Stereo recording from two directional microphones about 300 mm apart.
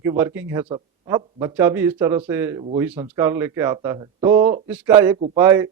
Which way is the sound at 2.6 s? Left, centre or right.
Centre.